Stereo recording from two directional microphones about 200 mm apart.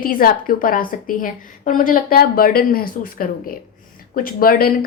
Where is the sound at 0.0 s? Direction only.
45° left (ahead or behind).